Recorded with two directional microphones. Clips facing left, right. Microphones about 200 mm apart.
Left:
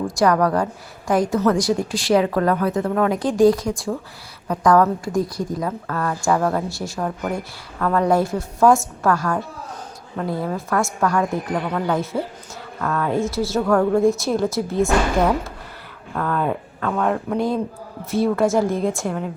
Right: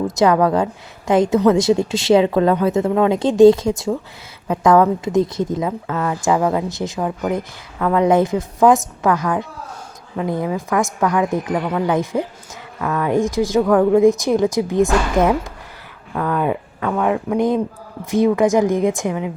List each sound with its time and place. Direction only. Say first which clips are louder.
0.2 s a woman's voice: right 3 dB; 20° right (ahead or behind)
16.1 s a woman's voice: right 3 dB; 5° right (ahead or behind)